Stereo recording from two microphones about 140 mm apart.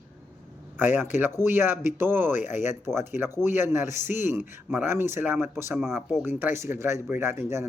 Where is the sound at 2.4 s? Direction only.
60° left (ahead or behind).